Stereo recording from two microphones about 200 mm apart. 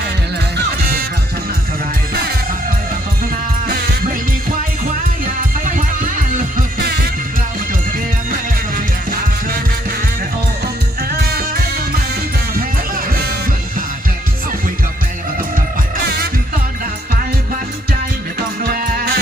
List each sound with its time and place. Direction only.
6.3 s music: 50° right (ahead or behind)
18.6 s music: 50° right (ahead or behind)